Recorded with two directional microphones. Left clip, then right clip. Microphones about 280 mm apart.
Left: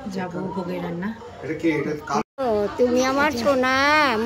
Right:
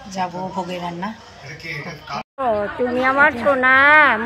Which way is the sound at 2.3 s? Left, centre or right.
Centre.